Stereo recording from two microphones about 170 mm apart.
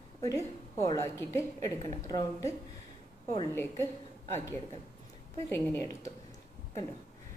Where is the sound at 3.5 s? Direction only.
15° left (ahead or behind).